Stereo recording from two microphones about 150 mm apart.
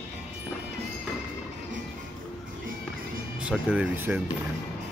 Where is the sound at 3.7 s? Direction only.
10° right (ahead or behind).